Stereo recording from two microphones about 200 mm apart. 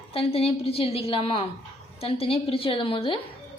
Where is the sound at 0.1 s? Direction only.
30° left (ahead or behind).